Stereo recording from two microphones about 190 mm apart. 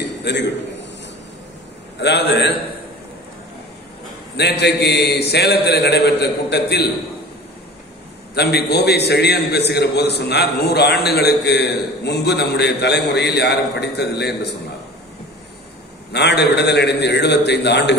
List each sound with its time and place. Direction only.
0.0 s a sound: 65° left (ahead or behind)
2.0 s a man's voice: 60° left (ahead or behind)
4.4 s a man's voice: 60° left (ahead or behind)
8.4 s a man's voice: 60° left (ahead or behind)
16.1 s a man's voice: 60° left (ahead or behind)